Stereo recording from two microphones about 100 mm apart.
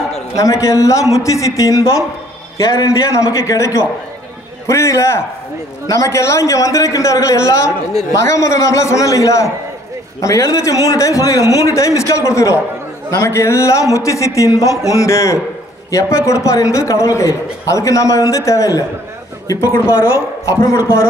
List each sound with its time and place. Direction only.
0.4 s a man's voice: 30° left (ahead or behind)